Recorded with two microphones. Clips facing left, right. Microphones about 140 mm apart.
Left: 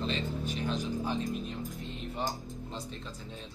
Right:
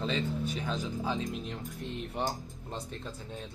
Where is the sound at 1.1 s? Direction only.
75° right (ahead or behind).